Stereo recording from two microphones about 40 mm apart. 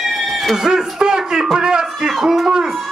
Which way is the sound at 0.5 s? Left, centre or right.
Centre.